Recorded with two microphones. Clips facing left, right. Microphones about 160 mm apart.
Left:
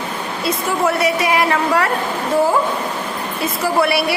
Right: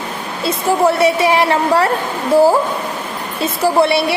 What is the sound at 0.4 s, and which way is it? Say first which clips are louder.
A woman's voice: right 5 dB; 30° right (ahead or behind).